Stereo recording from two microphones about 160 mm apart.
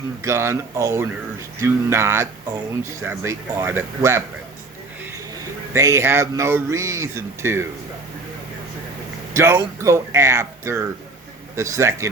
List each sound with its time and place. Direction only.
0.3 s speech: 15° right (ahead or behind)
5.7 s speech: 20° right (ahead or behind)
9.3 s a man's voice: 15° right (ahead or behind)